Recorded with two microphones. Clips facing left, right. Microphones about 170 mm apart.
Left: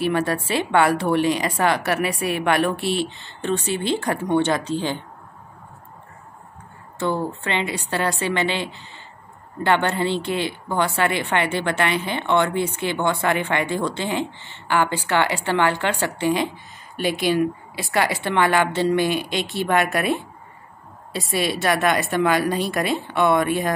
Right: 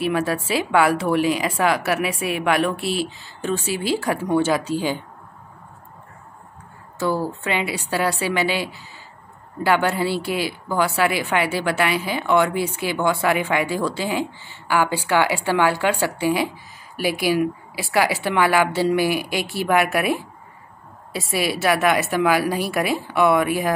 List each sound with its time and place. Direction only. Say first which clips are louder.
0.0 s a woman's voice: even; centre (ahead or behind)
7.0 s a woman's voice: right 1 dB; 5° right (ahead or behind)